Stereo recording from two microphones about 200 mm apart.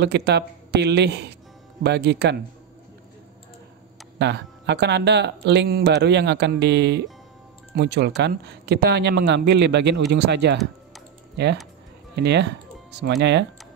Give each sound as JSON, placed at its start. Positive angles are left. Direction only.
{"t": 0.0, "sound": "speech", "side_deg": -55}
{"t": 4.2, "sound": "speech", "side_deg": -60}
{"t": 12.3, "sound": "speech", "side_deg": -60}